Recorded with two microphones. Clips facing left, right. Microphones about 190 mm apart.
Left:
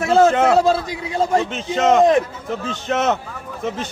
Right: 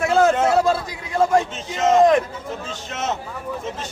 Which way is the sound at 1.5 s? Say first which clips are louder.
Left 2 dB; 70° left (ahead or behind).